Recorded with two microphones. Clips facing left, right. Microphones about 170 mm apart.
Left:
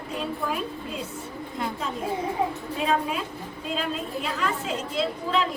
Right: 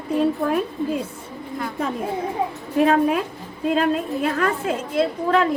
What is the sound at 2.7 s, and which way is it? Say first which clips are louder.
A woman's voice: right 10 dB; 55° right (ahead or behind).